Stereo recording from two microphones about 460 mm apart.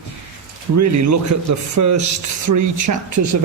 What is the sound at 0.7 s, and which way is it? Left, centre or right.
Speech, right.